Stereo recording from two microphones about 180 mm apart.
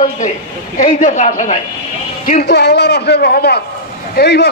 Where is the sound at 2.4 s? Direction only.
70° left (ahead or behind).